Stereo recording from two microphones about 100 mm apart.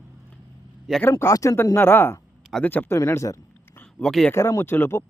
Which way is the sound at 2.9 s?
30° left (ahead or behind).